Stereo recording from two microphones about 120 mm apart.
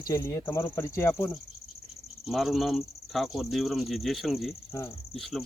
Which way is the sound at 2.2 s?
Centre (ahead or behind).